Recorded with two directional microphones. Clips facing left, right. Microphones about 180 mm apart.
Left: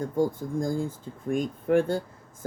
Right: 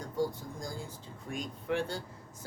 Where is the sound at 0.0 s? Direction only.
50° left (ahead or behind).